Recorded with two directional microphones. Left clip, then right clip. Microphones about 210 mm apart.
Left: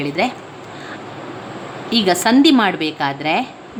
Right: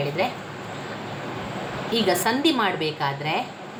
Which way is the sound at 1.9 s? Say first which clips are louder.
Left 7 dB; 45° left (ahead or behind).